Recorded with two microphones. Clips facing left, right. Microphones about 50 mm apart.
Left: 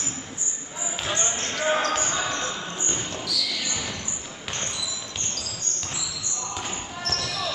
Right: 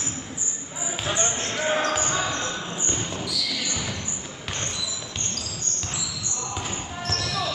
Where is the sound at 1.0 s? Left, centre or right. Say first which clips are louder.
Right 2 dB; centre.